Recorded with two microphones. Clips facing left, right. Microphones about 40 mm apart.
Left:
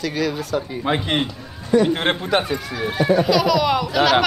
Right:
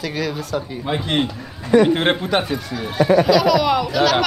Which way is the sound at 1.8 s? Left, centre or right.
Centre.